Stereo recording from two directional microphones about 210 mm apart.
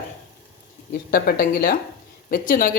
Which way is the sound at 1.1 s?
45° left (ahead or behind).